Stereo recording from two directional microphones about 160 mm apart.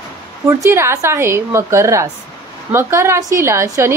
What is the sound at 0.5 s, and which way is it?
Speech, 15° right (ahead or behind).